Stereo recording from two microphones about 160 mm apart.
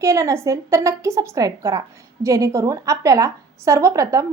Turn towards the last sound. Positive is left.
turn(degrees=-20)  # may be behind; listen again after turning